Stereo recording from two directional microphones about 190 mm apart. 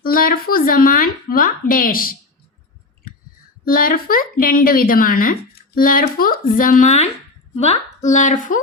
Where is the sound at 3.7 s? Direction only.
50° left (ahead or behind).